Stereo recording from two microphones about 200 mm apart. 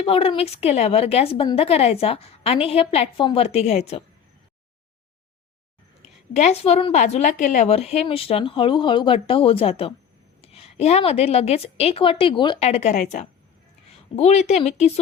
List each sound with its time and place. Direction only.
0.0 s a woman's voice: 25° left (ahead or behind)
6.0 s a woman's voice: 35° left (ahead or behind)